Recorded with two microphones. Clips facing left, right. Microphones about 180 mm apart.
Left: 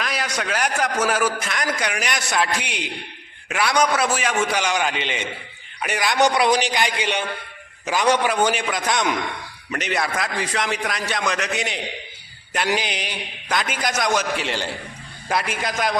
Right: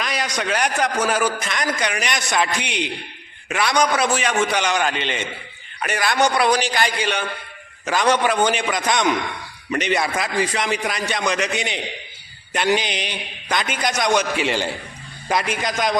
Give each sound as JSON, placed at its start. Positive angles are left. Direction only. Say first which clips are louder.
{"t": 0.0, "sound": "a man's voice", "louder": "right 2 dB", "side_deg": 5}